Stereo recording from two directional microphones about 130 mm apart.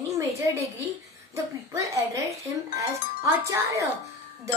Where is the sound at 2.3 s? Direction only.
25° right (ahead or behind).